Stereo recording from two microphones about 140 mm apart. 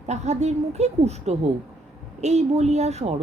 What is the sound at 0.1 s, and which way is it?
A woman's voice, 55° right (ahead or behind).